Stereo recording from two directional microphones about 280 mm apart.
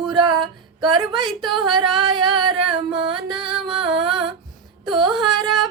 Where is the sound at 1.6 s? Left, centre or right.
Centre.